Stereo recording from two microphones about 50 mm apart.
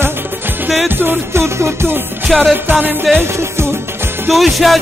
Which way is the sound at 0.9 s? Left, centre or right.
Right.